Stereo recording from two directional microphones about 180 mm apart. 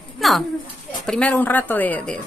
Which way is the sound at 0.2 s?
Centre (ahead or behind).